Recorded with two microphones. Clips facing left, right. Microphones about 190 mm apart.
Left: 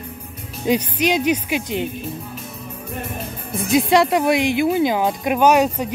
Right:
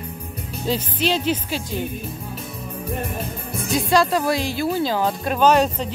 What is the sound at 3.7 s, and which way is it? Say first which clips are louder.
Speech: left 3 dB; 20° left (ahead or behind).